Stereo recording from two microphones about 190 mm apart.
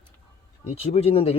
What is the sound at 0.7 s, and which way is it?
Speech, 30° left (ahead or behind).